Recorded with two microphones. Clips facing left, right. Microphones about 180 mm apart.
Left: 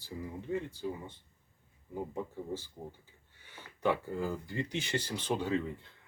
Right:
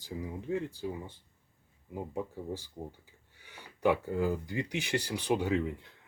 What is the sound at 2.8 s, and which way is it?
Speech, 20° right (ahead or behind).